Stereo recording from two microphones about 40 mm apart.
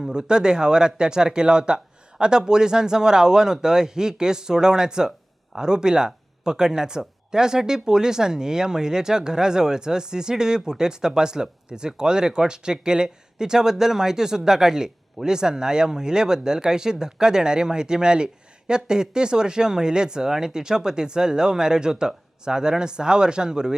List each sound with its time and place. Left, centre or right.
0.0 s speech: centre